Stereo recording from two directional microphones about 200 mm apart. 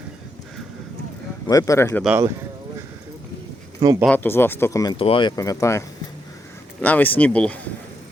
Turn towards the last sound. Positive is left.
turn(degrees=5)  # may be behind; listen again after turning